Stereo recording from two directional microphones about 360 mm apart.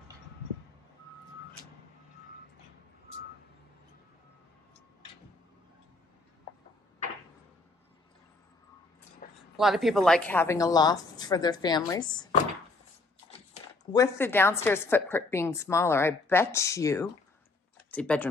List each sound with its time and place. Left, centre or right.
9.2 s a sound: left
9.6 s a woman's voice: centre
13.9 s a woman's voice: centre